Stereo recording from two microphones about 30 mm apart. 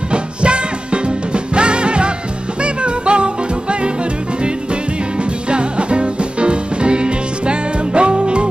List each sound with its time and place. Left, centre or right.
0.1 s music: right
5.5 s music: right